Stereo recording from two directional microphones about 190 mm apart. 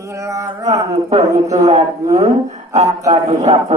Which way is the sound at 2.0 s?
35° right (ahead or behind).